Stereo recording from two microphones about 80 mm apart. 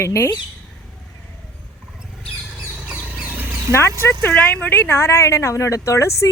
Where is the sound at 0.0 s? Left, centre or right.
Left.